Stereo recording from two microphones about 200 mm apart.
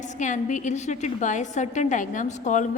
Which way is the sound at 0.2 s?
40° left (ahead or behind).